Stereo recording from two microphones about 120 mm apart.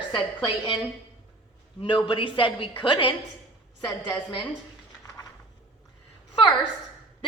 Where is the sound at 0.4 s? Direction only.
35° left (ahead or behind).